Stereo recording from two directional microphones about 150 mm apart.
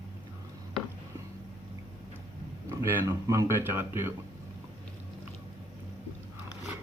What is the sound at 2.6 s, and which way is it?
Speech, 15° right (ahead or behind).